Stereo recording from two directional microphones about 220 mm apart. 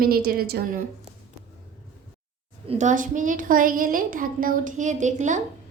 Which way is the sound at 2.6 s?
35° right (ahead or behind).